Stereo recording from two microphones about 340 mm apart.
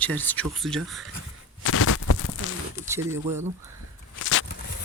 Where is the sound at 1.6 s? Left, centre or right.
Left.